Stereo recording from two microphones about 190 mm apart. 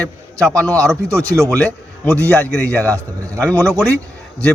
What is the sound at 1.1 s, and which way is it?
Speech, 15° right (ahead or behind).